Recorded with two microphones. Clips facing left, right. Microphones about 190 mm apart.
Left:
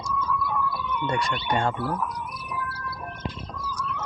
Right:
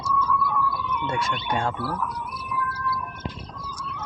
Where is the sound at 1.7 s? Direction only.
15° left (ahead or behind).